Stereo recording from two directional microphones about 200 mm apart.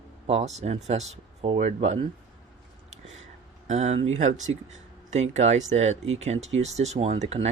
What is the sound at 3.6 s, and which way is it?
Speech, 35° right (ahead or behind).